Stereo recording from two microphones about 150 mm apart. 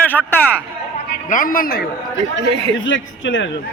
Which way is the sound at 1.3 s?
65° left (ahead or behind).